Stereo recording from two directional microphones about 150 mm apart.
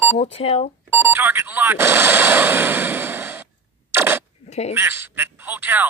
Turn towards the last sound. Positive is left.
turn(degrees=-15)  # may be behind; listen again after turning